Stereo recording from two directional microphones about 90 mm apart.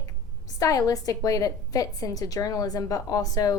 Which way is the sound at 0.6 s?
45° left (ahead or behind).